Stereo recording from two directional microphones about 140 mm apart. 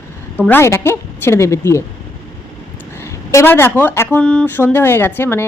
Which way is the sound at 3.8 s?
15° left (ahead or behind).